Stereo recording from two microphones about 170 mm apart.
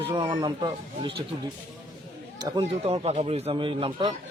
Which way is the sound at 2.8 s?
35° right (ahead or behind).